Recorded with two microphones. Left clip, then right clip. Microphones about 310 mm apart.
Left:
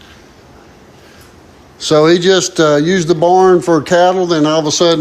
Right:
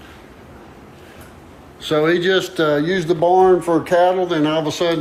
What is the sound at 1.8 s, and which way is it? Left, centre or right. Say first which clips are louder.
A man's voice: left 7 dB; centre.